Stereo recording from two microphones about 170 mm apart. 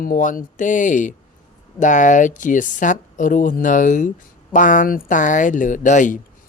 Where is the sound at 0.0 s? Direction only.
50° left (ahead or behind).